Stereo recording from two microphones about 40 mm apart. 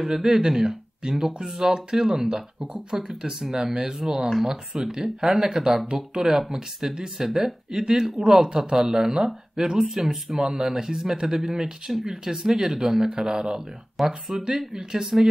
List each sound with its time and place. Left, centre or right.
0.0 s speech: centre
13.9 s speech: centre
14.7 s speech: centre